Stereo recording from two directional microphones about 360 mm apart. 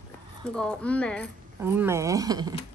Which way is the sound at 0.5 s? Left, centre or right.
Centre.